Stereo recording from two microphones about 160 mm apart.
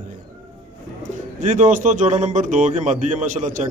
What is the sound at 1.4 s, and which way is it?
A man's voice, 50° right (ahead or behind).